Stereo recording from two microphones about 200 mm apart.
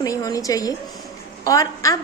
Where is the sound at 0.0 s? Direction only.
15° left (ahead or behind).